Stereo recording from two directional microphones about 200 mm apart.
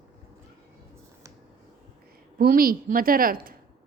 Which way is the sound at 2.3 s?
45° right (ahead or behind).